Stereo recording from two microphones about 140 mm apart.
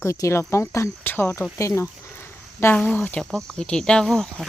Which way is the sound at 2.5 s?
15° left (ahead or behind).